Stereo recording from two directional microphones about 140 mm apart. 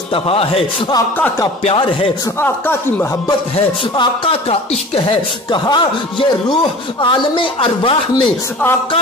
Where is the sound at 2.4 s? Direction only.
15° left (ahead or behind).